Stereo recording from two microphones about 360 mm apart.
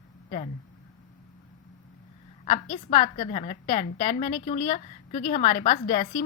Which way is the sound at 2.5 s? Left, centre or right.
Centre.